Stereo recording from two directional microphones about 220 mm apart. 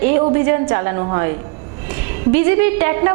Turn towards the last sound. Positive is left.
turn(degrees=-15)  # may be behind; listen again after turning